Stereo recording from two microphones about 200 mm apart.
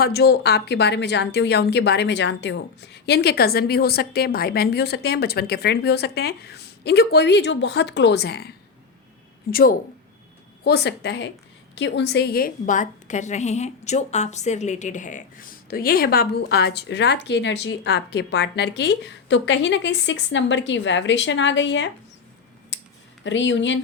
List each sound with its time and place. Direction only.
0.0 s a woman's voice: 55° left (ahead or behind)
23.2 s speech: 65° left (ahead or behind)